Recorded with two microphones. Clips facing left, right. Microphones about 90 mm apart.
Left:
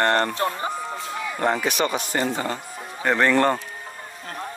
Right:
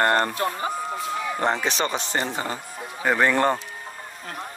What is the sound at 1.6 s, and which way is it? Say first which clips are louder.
Speech: left 2 dB; 30° right (ahead or behind).